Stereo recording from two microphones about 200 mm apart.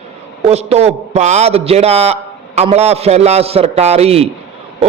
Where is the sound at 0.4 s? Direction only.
30° right (ahead or behind).